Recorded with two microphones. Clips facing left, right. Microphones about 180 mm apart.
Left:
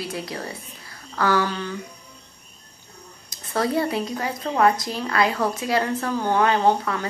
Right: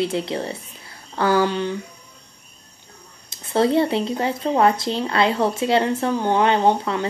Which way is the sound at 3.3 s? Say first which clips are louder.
Right 5 dB; 25° right (ahead or behind).